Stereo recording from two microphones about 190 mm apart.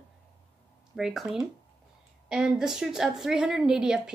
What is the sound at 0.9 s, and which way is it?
Speech, centre (ahead or behind).